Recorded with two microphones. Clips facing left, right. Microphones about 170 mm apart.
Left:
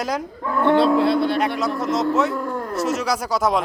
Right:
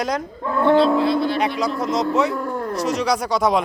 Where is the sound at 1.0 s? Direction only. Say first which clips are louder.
Left 1 dB; 60° left (ahead or behind).